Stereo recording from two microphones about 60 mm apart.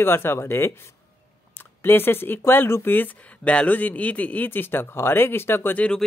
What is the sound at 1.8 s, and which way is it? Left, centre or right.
Speech, left.